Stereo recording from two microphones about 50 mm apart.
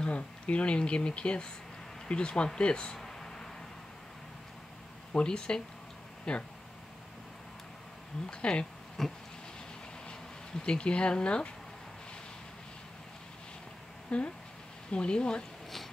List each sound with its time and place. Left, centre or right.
0.0 s speech: left
3.0 s a sound: centre
5.1 s speech: centre
8.3 s speech: left
9.0 s a sound: centre
10.0 s speech: centre
14.1 s speech: centre